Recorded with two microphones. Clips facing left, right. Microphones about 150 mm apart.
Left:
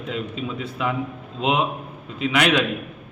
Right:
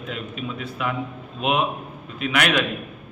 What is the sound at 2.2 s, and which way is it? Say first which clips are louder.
Speech: left 2 dB; 25° left (ahead or behind).